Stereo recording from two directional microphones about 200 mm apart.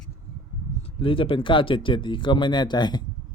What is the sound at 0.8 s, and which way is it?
Speech, 30° left (ahead or behind).